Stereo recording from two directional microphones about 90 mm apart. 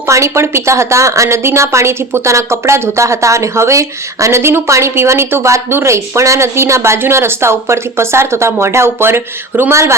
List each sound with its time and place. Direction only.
0.1 s a woman's voice: 30° right (ahead or behind)